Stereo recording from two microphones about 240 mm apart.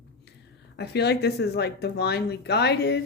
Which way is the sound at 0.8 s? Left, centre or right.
Left.